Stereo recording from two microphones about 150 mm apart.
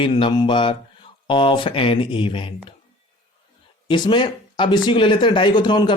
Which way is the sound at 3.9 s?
30° left (ahead or behind).